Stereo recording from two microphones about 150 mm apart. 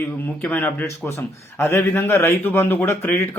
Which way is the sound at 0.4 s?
10° left (ahead or behind).